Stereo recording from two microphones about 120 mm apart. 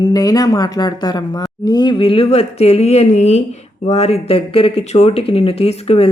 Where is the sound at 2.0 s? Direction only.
50° left (ahead or behind).